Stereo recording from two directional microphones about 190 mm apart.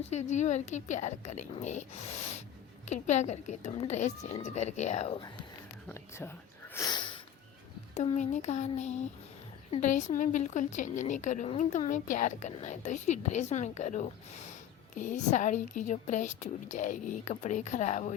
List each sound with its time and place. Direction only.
0.1 s a woman's voice: 40° left (ahead or behind)
5.9 s speech: 10° left (ahead or behind)
6.7 s sneeze: 20° left (ahead or behind)
7.9 s a woman's voice: 35° left (ahead or behind)